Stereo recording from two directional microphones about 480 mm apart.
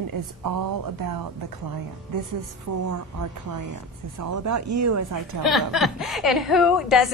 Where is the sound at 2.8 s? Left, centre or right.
Right.